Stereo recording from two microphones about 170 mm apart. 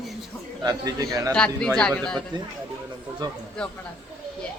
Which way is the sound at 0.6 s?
20° right (ahead or behind).